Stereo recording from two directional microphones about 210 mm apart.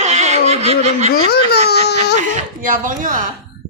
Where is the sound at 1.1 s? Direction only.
50° left (ahead or behind).